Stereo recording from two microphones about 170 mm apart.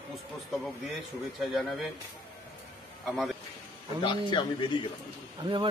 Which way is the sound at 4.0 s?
30° left (ahead or behind).